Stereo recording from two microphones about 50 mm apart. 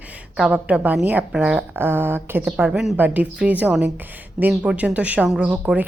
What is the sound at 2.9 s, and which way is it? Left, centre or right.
Speech, right.